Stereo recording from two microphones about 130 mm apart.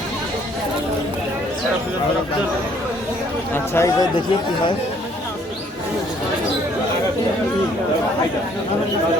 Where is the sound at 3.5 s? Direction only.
20° left (ahead or behind).